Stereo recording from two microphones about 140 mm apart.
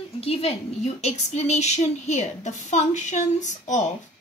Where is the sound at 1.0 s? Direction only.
50° left (ahead or behind).